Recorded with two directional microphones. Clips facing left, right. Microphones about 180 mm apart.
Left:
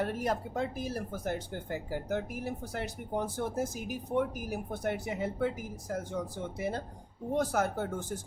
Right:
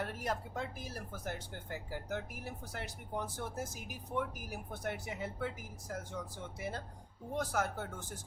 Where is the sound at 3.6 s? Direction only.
25° left (ahead or behind).